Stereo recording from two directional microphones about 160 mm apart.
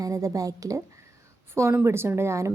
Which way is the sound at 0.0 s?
20° right (ahead or behind).